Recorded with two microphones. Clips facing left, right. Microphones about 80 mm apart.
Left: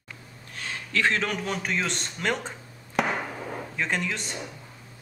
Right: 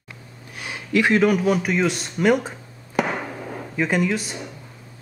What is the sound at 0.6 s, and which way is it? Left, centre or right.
A man's voice, centre.